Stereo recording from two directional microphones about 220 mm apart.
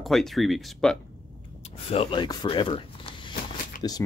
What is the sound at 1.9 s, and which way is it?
Speech, 25° left (ahead or behind).